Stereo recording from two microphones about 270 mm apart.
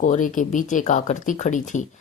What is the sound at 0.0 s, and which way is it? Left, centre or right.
Speech, left.